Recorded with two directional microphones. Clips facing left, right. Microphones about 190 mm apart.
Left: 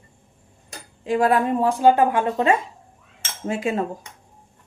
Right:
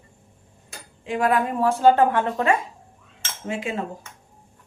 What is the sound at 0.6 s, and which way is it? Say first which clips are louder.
Tick-tock: left 6 dB; 40° left (ahead or behind).